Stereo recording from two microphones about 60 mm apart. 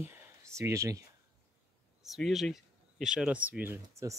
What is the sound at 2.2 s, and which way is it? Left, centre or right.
Speech, centre.